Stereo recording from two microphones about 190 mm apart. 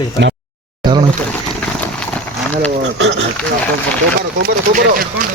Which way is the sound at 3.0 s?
70° right (ahead or behind).